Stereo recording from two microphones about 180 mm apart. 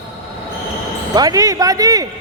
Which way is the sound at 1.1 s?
20° right (ahead or behind).